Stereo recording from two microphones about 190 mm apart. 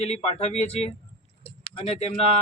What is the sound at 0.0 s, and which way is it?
Speech, 35° left (ahead or behind).